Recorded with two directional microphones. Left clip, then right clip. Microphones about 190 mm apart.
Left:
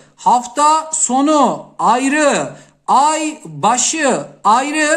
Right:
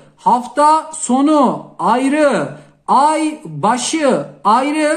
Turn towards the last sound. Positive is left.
turn(degrees=30)  # may be behind; listen again after turning